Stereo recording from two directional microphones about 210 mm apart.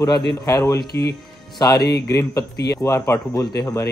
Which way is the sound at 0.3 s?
20° left (ahead or behind).